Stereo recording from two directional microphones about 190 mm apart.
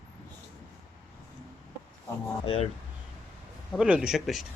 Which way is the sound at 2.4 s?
30° left (ahead or behind).